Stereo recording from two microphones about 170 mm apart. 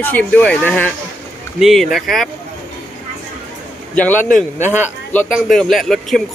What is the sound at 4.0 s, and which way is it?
Speech, 10° left (ahead or behind).